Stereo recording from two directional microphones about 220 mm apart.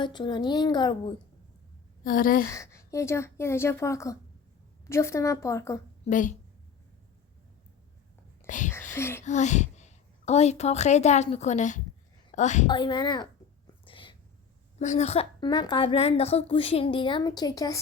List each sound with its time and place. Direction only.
0.0 s a woman's voice: 20° left (ahead or behind)
2.0 s speech: 40° left (ahead or behind)
2.5 s a woman's voice: 15° left (ahead or behind)
6.1 s speech: 35° left (ahead or behind)
8.4 s speech: 35° left (ahead or behind)
9.0 s a woman's voice: 10° left (ahead or behind)
9.2 s a woman's voice: 35° left (ahead or behind)
12.6 s a woman's voice: 20° left (ahead or behind)
13.8 s whispering: 25° left (ahead or behind)
14.8 s a woman's voice: 30° left (ahead or behind)